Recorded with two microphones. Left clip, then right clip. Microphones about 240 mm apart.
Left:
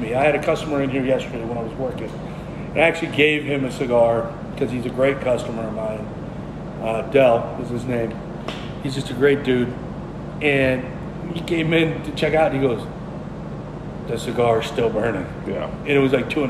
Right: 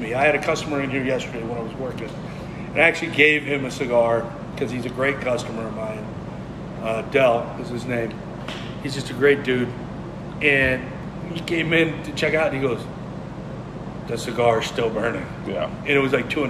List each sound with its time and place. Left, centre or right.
0.0 s a man's voice: centre
2.7 s a man's voice: centre
6.8 s a man's voice: centre
14.1 s a man's voice: centre